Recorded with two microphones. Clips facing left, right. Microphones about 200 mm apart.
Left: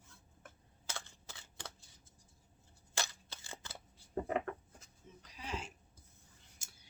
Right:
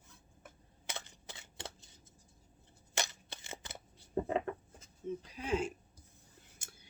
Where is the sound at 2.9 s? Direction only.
20° right (ahead or behind).